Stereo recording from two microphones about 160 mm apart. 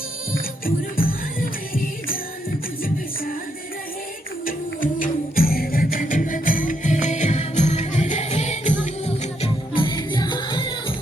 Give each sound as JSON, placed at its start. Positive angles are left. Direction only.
{"t": 0.3, "sound": "music", "side_deg": 65}
{"t": 4.4, "sound": "music", "side_deg": 60}